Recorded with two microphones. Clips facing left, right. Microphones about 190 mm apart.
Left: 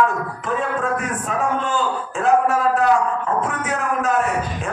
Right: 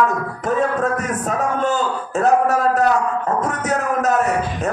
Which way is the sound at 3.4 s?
40° right (ahead or behind).